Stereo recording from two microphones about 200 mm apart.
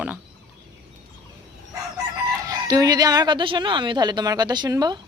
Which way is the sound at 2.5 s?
20° right (ahead or behind).